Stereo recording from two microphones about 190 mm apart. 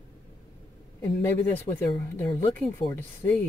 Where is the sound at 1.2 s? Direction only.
10° left (ahead or behind).